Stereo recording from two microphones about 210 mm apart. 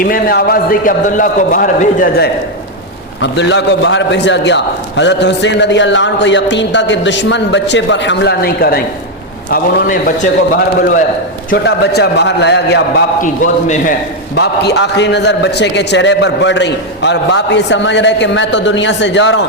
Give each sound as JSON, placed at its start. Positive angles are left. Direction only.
{"t": 0.0, "sound": "a man's voice", "side_deg": 45}
{"t": 3.2, "sound": "a man's voice", "side_deg": 55}
{"t": 10.5, "sound": "a man's voice", "side_deg": 40}
{"t": 11.5, "sound": "a man's voice", "side_deg": 50}
{"t": 13.2, "sound": "a man's voice", "side_deg": 40}
{"t": 14.3, "sound": "a man's voice", "side_deg": 55}